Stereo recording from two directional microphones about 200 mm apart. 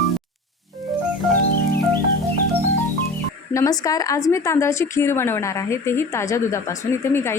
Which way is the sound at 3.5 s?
15° left (ahead or behind).